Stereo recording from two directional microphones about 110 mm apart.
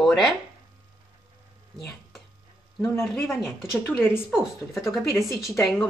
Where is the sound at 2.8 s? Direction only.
20° left (ahead or behind).